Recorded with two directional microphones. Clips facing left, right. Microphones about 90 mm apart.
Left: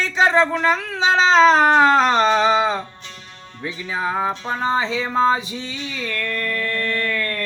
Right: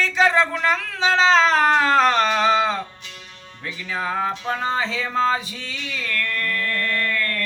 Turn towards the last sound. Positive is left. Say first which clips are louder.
# left 1 dB
turn(degrees=20)  # may be behind; listen again after turning